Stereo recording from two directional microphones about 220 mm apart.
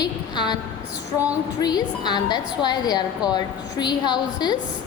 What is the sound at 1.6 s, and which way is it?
A woman's voice, 20° left (ahead or behind).